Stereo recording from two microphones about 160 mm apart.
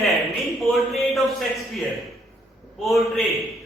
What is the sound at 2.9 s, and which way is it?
Mantra, centre (ahead or behind).